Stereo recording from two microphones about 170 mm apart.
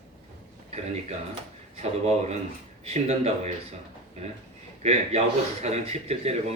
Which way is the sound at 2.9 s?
40° right (ahead or behind).